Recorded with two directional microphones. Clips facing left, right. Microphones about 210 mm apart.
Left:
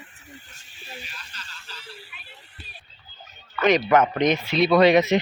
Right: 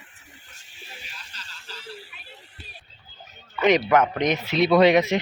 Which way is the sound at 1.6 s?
40° right (ahead or behind).